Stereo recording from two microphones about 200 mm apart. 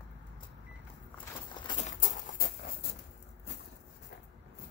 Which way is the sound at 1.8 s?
40° left (ahead or behind).